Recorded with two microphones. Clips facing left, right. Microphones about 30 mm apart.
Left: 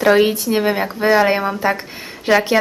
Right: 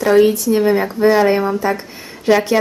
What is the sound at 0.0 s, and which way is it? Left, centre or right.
A woman's voice, left.